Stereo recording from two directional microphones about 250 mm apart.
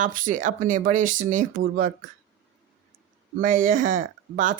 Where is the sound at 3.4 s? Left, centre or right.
Right.